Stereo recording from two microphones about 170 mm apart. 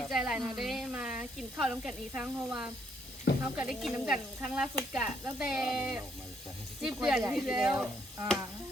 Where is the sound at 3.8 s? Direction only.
5° right (ahead or behind).